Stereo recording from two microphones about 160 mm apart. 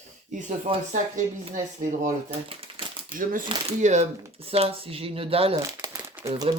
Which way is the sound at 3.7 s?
45° right (ahead or behind).